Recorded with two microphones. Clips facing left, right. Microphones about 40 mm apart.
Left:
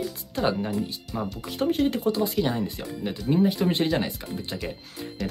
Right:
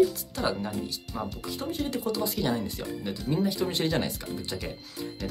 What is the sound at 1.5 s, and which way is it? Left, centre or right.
Speech, left.